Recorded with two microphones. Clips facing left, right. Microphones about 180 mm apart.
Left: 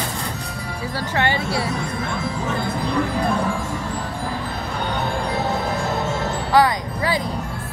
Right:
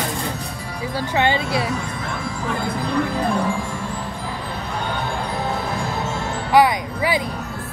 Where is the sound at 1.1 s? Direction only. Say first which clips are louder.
Right 2 dB; 20° right (ahead or behind).